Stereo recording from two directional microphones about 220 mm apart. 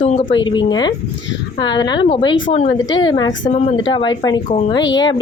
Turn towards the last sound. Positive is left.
turn(degrees=20)  # may be behind; listen again after turning